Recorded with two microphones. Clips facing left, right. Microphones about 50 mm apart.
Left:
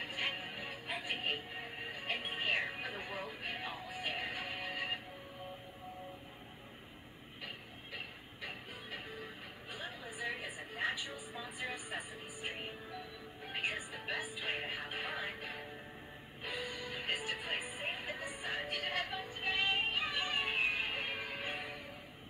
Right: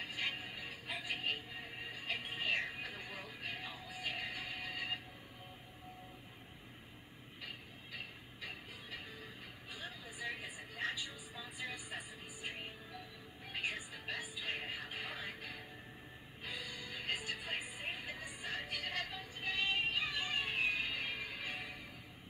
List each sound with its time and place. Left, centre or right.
0.0 s music: left
7.4 s music: left
18.7 s synthetic singing: left